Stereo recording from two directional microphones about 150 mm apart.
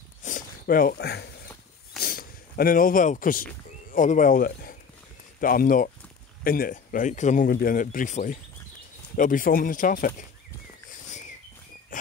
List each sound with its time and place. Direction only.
0.2 s a sound: 65° left (ahead or behind)
3.9 s speech: 60° left (ahead or behind)
7.4 s speech: 75° left (ahead or behind)